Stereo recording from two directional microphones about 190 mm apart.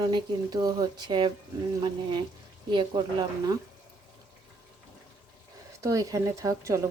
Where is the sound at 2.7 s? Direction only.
25° right (ahead or behind).